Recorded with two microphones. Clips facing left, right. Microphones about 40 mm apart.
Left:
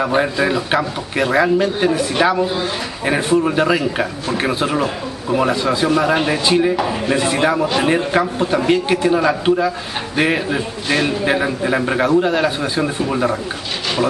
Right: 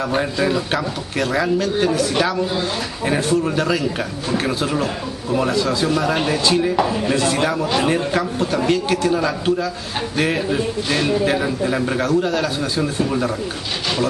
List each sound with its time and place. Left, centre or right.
0.0 s a man's voice: centre
7.6 s speech: centre
7.9 s a man's voice: centre